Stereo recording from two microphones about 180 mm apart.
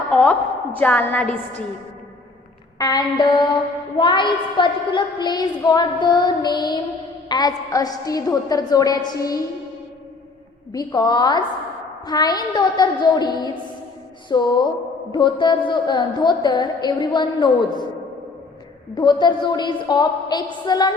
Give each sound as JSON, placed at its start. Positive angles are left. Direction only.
{"t": 0.1, "sound": "a woman's voice", "side_deg": 5}
{"t": 2.7, "sound": "a woman's voice", "side_deg": 20}
{"t": 10.7, "sound": "a woman's voice", "side_deg": 20}
{"t": 18.9, "sound": "a woman's voice", "side_deg": 25}